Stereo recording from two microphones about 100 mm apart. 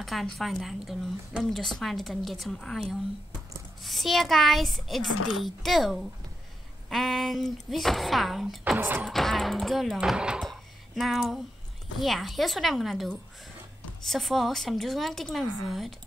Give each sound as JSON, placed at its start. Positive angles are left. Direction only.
{"t": 0.0, "sound": "a woman's voice", "side_deg": 0}
{"t": 8.7, "sound": "music", "side_deg": -20}
{"t": 9.0, "sound": "speech", "side_deg": 0}
{"t": 10.5, "sound": "a sound", "side_deg": 0}
{"t": 12.0, "sound": "a woman's voice", "side_deg": 0}